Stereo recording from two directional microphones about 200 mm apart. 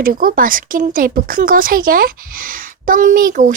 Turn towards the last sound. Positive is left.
turn(degrees=-40)  # may be behind; listen again after turning